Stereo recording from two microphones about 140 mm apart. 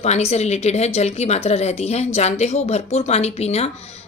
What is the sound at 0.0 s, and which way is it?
A woman's voice, 50° left (ahead or behind).